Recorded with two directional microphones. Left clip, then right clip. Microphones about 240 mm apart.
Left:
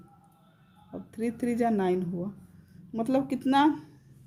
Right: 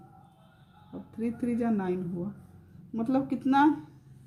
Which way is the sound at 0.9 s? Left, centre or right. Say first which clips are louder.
Left 2 dB; left.